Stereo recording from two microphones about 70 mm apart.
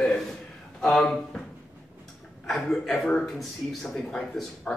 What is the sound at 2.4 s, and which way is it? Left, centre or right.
Speech, centre.